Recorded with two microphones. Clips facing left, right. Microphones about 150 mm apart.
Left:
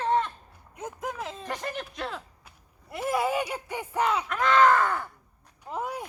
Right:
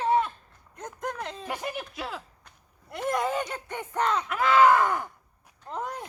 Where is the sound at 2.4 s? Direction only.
5° left (ahead or behind).